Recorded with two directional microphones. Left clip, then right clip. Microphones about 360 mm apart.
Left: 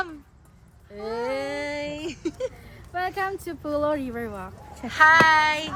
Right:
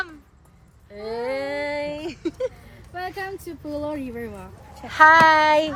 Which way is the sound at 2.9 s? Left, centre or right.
Centre.